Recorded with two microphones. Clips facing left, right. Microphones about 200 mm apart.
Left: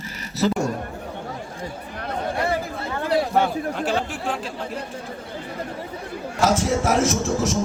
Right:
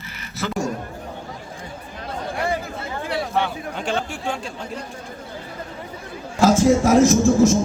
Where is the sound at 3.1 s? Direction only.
40° left (ahead or behind).